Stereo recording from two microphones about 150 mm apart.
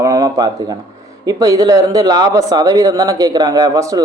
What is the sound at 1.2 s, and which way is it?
Speech, 25° right (ahead or behind).